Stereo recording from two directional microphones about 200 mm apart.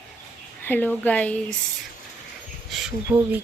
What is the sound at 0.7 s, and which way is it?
Speech, 10° left (ahead or behind).